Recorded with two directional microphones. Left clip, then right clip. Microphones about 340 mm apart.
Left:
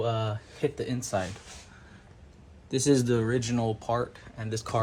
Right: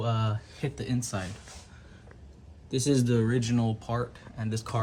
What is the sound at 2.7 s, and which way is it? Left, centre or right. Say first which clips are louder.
Speech: left 3 dB; centre.